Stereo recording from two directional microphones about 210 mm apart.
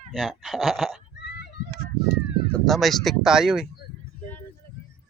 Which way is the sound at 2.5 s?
Centre (ahead or behind).